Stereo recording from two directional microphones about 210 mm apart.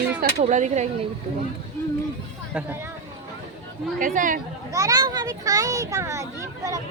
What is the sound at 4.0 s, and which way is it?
Speech, 40° right (ahead or behind).